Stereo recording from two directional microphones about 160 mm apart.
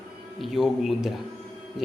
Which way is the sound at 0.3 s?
Centre (ahead or behind).